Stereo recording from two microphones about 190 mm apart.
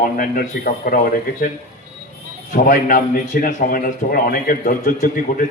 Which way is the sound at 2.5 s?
45° left (ahead or behind).